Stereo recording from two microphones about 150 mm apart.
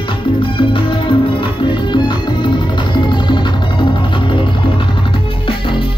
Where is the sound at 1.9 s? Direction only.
30° left (ahead or behind).